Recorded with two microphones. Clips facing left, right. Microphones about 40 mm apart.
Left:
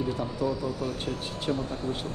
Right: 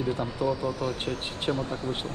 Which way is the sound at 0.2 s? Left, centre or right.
Right.